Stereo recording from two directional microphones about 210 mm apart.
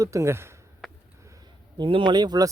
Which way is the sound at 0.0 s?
15° right (ahead or behind).